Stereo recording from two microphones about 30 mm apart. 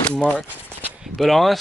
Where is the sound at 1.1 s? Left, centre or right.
Centre.